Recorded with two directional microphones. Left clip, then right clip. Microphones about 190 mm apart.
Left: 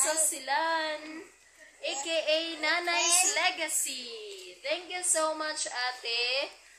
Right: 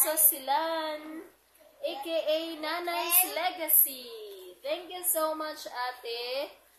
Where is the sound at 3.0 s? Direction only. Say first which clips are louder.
Left 3 dB; 70° left (ahead or behind).